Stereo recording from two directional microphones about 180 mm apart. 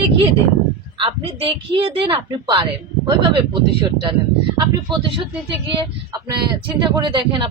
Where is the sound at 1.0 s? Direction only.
30° right (ahead or behind).